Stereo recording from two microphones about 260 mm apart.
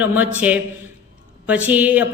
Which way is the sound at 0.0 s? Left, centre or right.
Centre.